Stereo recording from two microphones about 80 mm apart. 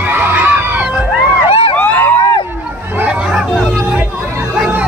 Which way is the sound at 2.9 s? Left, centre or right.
Centre.